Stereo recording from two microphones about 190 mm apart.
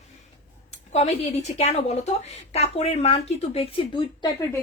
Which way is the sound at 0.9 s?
35° left (ahead or behind).